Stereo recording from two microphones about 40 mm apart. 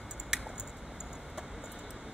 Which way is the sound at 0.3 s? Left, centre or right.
Centre.